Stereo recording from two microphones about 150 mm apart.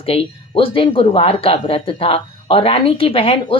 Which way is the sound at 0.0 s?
40° left (ahead or behind).